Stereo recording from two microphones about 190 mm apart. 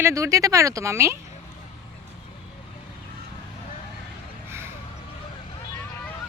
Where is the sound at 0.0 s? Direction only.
15° right (ahead or behind).